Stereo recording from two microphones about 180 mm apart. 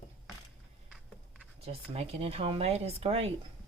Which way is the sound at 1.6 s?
35° right (ahead or behind).